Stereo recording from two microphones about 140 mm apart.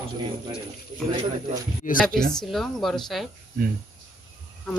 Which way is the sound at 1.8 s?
70° left (ahead or behind).